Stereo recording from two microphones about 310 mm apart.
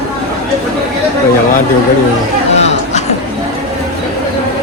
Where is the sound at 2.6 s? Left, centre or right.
Left.